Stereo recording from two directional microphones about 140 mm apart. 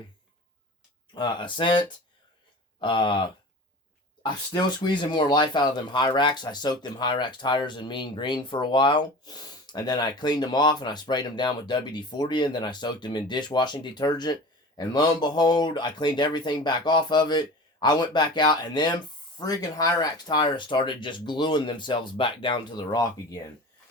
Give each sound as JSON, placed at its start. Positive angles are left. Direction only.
{"t": 1.1, "sound": "speech", "side_deg": 35}
{"t": 2.8, "sound": "speech", "side_deg": 35}